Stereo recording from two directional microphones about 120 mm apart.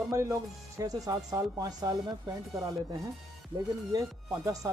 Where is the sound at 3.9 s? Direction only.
30° right (ahead or behind).